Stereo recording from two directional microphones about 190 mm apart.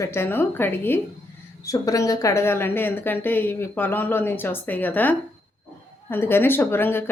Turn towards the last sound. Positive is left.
turn(degrees=10)  # may be behind; listen again after turning